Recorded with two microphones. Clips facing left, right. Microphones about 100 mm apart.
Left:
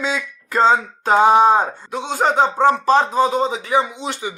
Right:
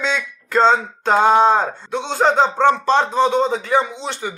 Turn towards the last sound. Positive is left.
turn(degrees=10)  # may be behind; listen again after turning